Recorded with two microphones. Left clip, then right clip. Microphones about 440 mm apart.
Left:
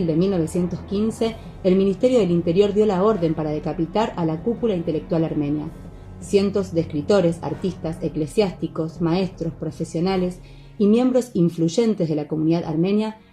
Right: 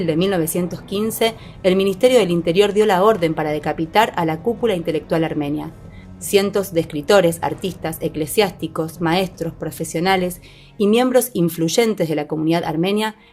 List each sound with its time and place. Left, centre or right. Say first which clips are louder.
0.1 s a woman's voice: right 4 dB; centre